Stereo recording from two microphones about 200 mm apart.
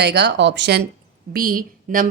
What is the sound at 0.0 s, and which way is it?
Speech, 55° right (ahead or behind).